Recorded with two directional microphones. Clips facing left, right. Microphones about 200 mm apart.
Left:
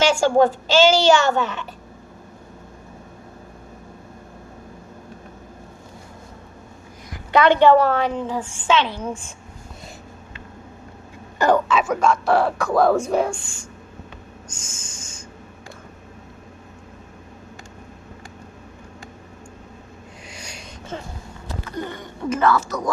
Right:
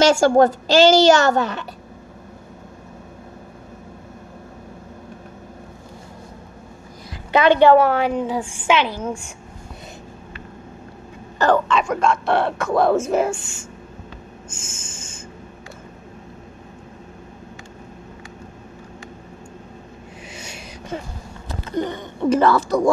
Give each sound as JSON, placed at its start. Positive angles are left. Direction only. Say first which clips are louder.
{"t": 0.0, "sound": "a woman's voice", "louder": "right 3 dB", "side_deg": -40}
{"t": 7.3, "sound": "a woman's voice", "louder": "right 1 dB", "side_deg": -15}
{"t": 11.3, "sound": "speech", "louder": "even", "side_deg": 10}
{"t": 20.2, "sound": "a sound", "louder": "right 2 dB", "side_deg": -5}
{"t": 21.6, "sound": "a sound", "louder": "right 7 dB", "side_deg": -20}
{"t": 22.3, "sound": "a woman's voice", "louder": "right 3 dB", "side_deg": -35}